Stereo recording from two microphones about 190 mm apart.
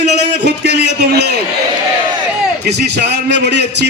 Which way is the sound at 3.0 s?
65° right (ahead or behind).